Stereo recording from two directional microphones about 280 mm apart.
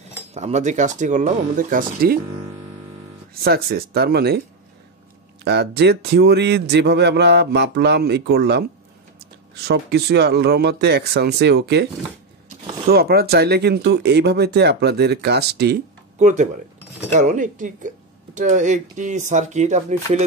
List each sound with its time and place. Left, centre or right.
0.3 s speech: right
3.4 s speech: right
5.4 s speech: right
9.7 s speech: right
12.4 s zipper: centre
12.9 s speech: right